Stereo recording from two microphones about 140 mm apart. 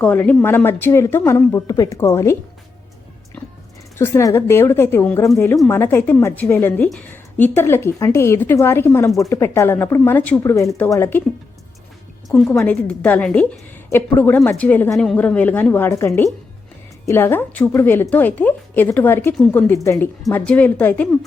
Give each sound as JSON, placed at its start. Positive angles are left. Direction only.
{"t": 0.0, "sound": "a woman's voice", "side_deg": 10}
{"t": 3.9, "sound": "a woman's voice", "side_deg": 20}
{"t": 12.3, "sound": "a woman's voice", "side_deg": 5}
{"t": 20.3, "sound": "a woman's voice", "side_deg": 10}